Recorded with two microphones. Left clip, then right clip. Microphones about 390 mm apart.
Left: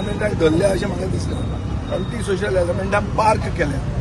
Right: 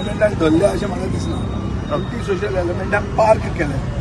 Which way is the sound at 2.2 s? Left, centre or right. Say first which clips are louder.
Left 2 dB; centre.